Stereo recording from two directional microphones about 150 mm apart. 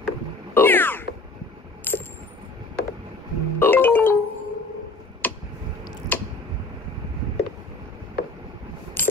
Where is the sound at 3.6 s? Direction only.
10° left (ahead or behind).